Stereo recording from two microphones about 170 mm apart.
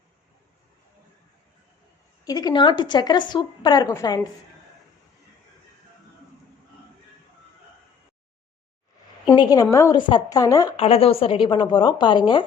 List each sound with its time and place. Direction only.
2.2 s a woman's voice: 25° left (ahead or behind)
9.3 s a woman's voice: 25° left (ahead or behind)
10.8 s a woman's voice: 35° left (ahead or behind)